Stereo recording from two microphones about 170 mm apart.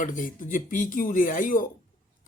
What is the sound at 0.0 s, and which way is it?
Speech, 50° left (ahead or behind).